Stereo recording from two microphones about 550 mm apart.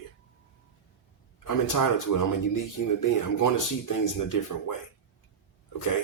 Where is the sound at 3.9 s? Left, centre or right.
Left.